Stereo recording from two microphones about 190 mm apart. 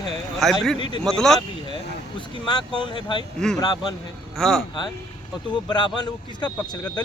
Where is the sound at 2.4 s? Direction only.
25° left (ahead or behind).